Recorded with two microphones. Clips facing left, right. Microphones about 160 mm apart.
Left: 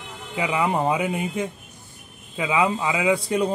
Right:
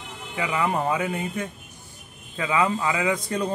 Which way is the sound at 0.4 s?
15° left (ahead or behind).